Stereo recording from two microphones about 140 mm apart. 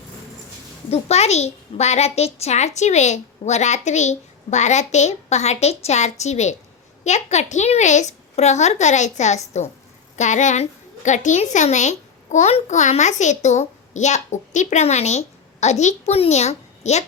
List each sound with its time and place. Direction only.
0.9 s a child's voice: 50° left (ahead or behind)